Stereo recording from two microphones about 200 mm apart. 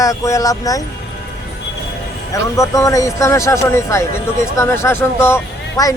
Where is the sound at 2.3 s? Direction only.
15° left (ahead or behind).